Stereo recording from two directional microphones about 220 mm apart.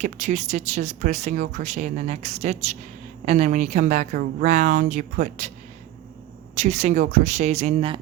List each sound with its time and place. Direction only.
0.0 s speech: 35° right (ahead or behind)
6.6 s speech: 30° right (ahead or behind)